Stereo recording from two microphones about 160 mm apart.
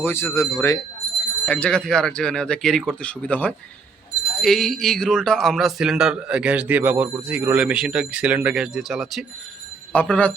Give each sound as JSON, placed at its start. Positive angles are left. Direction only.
{"t": 0.0, "sound": "speech", "side_deg": 15}
{"t": 1.5, "sound": "speech", "side_deg": 5}
{"t": 9.9, "sound": "speech", "side_deg": 10}